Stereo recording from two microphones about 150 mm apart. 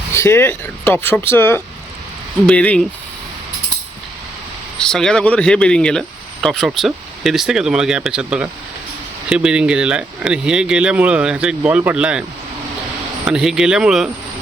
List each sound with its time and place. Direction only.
0.1 s speech: 15° left (ahead or behind)
4.8 s speech: 5° left (ahead or behind)
13.2 s speech: 5° right (ahead or behind)